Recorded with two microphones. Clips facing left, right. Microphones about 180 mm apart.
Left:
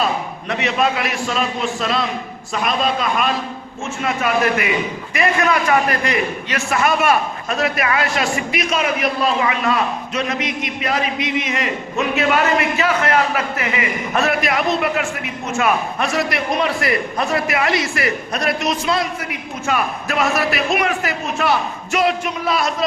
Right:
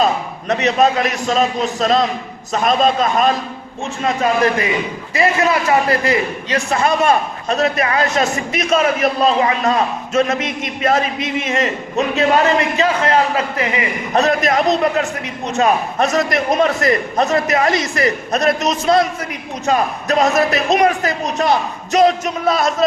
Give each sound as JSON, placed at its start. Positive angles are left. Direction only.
{"t": 0.0, "sound": "a man's voice", "side_deg": -40}
{"t": 9.0, "sound": "a man's voice", "side_deg": -30}